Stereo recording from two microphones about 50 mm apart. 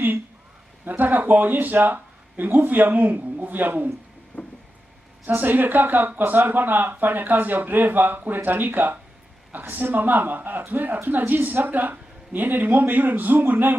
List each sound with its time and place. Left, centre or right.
0.8 s speech: right
4.3 s a sound: left
5.3 s speech: right